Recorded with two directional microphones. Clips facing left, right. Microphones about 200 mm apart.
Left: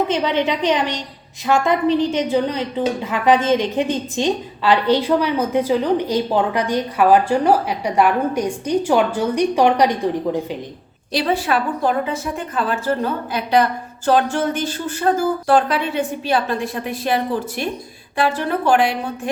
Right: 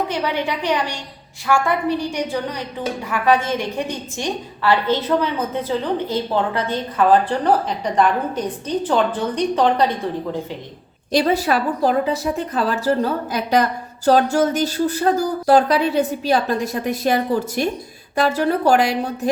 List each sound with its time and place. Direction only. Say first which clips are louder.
0.1 s a woman's voice: left 3 dB; 20° left (ahead or behind)
11.1 s a woman's voice: right 2 dB; 45° right (ahead or behind)
18.2 s a woman's voice: right 2 dB; 40° right (ahead or behind)